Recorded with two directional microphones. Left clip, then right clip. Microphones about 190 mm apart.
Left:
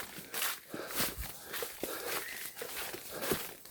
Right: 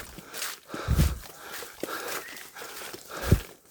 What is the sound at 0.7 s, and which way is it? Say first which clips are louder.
Walk: right 6 dB; 40° right (ahead or behind).